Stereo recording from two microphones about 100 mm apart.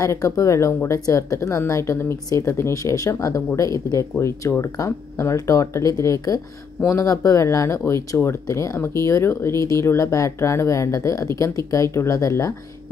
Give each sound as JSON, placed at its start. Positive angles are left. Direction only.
{"t": 0.0, "sound": "speech", "side_deg": 30}